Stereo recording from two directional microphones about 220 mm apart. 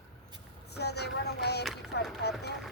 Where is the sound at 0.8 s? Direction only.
50° left (ahead or behind).